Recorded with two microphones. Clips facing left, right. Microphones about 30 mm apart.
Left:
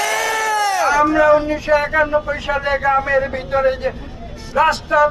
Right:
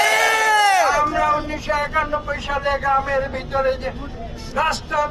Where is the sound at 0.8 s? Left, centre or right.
Centre.